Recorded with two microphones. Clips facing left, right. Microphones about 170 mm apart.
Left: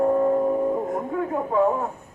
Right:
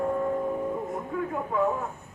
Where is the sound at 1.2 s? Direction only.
30° left (ahead or behind).